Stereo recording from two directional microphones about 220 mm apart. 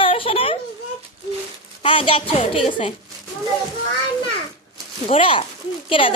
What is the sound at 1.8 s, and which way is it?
A woman's voice, 25° left (ahead or behind).